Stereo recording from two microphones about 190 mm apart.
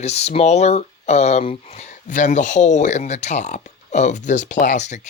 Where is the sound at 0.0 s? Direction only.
35° left (ahead or behind).